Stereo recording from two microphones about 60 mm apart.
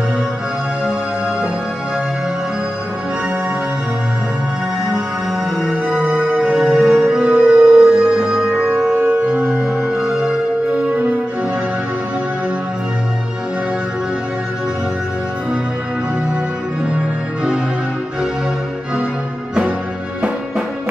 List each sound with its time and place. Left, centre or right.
5.9 s music: centre
6.7 s music: centre
8.9 s organ: right